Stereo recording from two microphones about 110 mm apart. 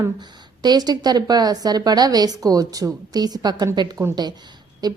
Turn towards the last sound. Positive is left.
turn(degrees=-40)  # may be behind; listen again after turning